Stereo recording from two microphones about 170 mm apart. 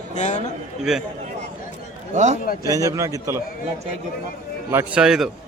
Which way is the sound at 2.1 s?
45° right (ahead or behind).